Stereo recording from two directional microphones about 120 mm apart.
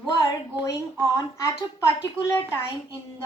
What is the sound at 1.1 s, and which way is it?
Speech, 25° left (ahead or behind).